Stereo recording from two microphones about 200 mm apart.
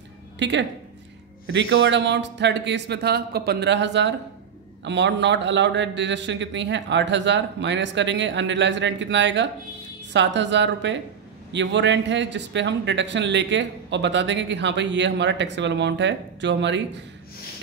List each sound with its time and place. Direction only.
0.4 s a man's voice: 65° right (ahead or behind)